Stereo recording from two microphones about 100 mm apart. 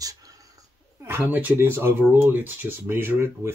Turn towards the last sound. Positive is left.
turn(degrees=-25)  # may be behind; listen again after turning